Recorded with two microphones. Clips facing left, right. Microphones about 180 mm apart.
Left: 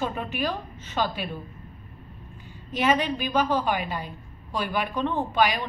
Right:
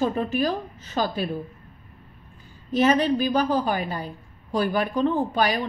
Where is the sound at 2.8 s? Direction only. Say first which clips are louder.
Right 4 dB; 40° right (ahead or behind).